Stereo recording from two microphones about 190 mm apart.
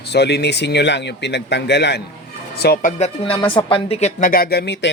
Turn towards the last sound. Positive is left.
turn(degrees=60)  # may be behind; listen again after turning